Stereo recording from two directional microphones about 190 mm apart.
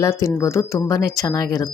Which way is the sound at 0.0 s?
15° left (ahead or behind).